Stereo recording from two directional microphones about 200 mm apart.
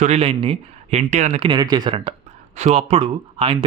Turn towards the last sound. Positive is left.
turn(degrees=-25)  # may be behind; listen again after turning